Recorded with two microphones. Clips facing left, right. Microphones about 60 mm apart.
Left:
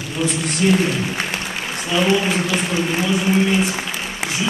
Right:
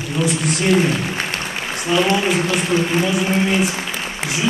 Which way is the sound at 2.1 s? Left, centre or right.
Centre.